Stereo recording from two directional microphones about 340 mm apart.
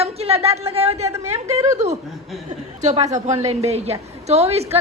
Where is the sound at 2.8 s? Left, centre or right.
Centre.